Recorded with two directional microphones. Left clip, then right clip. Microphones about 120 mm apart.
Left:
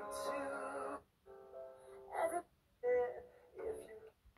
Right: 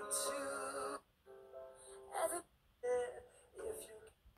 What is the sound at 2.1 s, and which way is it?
Music, 30° left (ahead or behind).